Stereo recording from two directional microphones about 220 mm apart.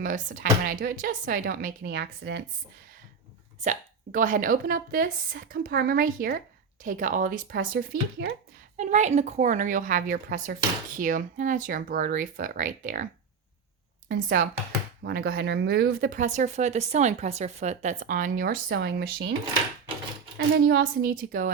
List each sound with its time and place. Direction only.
0.0 s speech: 35° right (ahead or behind)
3.6 s speech: 35° right (ahead or behind)
8.8 s speech: 30° right (ahead or behind)
14.1 s speech: 40° right (ahead or behind)
20.7 s speech: 45° right (ahead or behind)